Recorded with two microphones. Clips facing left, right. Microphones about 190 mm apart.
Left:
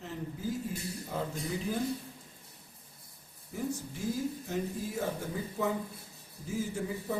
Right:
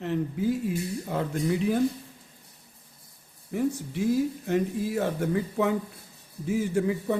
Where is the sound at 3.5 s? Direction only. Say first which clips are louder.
Right 8 dB; 70° right (ahead or behind).